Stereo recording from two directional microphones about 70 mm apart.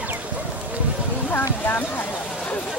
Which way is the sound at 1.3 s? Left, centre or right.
Left.